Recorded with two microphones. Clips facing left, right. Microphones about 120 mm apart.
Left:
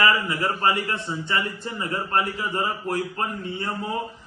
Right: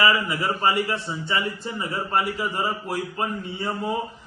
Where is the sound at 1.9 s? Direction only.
10° right (ahead or behind).